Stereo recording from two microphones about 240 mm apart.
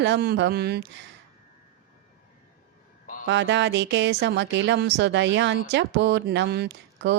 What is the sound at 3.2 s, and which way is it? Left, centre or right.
Speech, right.